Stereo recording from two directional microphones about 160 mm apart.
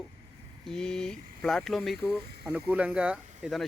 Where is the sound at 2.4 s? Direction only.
10° right (ahead or behind).